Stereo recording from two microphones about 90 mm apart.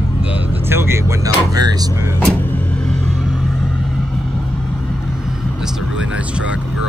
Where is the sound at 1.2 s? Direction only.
45° right (ahead or behind).